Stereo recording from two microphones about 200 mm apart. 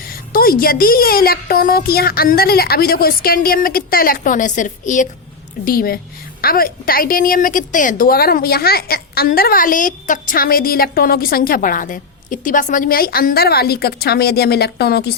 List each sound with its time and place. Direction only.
0.3 s a woman's voice: 45° left (ahead or behind)